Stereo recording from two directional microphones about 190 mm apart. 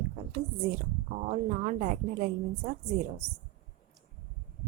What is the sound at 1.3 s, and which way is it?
Speech, 40° right (ahead or behind).